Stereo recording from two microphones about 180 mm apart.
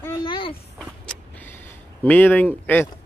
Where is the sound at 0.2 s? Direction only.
30° left (ahead or behind).